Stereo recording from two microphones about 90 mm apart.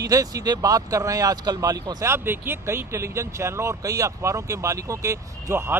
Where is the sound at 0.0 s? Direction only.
45° right (ahead or behind).